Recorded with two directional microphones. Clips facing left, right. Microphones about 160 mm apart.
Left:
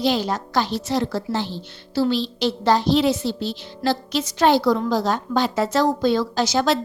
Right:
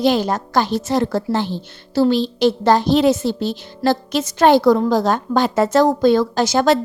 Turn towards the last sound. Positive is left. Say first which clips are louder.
# right 4 dB
turn(degrees=-50)  # may be behind; listen again after turning